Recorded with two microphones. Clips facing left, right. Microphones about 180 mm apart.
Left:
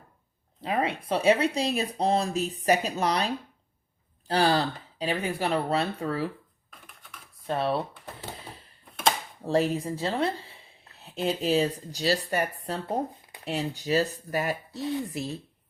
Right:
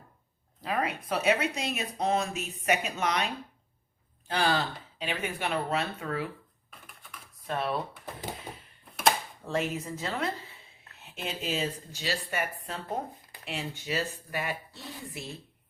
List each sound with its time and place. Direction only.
0.6 s speech: 25° left (ahead or behind)
6.7 s typing: 5° right (ahead or behind)
7.4 s speech: 30° left (ahead or behind)
9.4 s speech: 35° left (ahead or behind)